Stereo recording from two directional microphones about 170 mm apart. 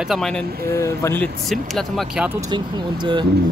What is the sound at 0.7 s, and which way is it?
Speech, 15° left (ahead or behind).